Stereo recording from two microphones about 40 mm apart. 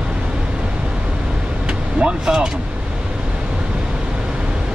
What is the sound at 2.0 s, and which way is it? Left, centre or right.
Vehicle, centre.